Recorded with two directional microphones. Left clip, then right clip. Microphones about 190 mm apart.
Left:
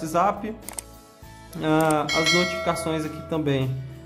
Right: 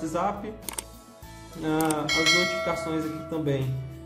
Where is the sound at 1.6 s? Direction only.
25° left (ahead or behind).